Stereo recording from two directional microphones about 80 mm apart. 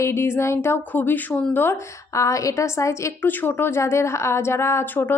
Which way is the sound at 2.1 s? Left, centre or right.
Left.